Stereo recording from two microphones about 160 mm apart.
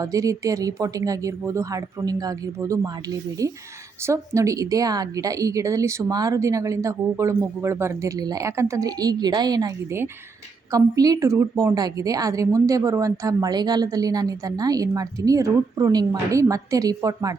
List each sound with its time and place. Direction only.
0.0 s a woman's voice: 20° right (ahead or behind)